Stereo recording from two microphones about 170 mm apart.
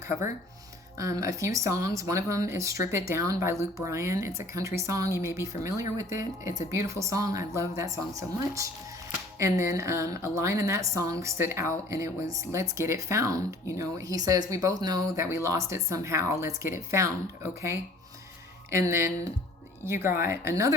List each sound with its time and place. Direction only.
0.9 s a woman's voice: 20° right (ahead or behind)